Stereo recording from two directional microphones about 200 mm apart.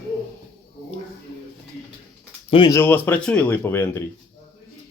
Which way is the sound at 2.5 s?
20° left (ahead or behind).